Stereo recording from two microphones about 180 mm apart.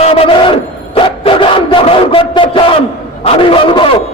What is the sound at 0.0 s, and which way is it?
Crowd, 30° left (ahead or behind).